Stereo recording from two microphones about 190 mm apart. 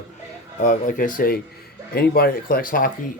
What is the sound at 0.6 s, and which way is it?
Speech, 40° left (ahead or behind).